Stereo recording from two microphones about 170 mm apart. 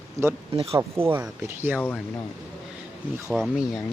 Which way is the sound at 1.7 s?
10° left (ahead or behind).